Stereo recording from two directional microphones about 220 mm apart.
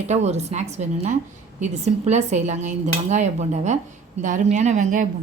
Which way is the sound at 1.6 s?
30° right (ahead or behind).